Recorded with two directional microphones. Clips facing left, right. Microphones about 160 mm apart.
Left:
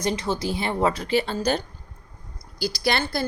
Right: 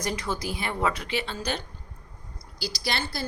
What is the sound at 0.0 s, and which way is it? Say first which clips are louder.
A woman's voice: left 5 dB; 25° left (ahead or behind).